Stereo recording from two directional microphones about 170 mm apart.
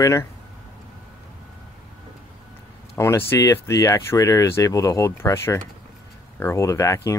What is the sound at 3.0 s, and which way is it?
Speech, 15° left (ahead or behind).